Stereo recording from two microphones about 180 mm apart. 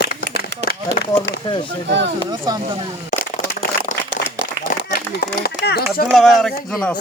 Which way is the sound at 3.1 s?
40° left (ahead or behind).